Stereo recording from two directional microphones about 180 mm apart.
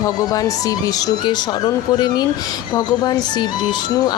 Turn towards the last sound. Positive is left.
turn(degrees=25)  # may be behind; listen again after turning